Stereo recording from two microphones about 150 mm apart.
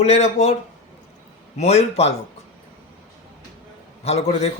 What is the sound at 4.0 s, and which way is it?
Speech, 45° left (ahead or behind).